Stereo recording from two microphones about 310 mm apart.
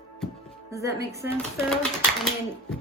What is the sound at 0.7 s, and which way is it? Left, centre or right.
Speech, centre.